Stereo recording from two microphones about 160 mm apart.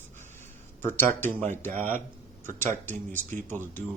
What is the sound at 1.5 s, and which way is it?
Speech, 10° left (ahead or behind).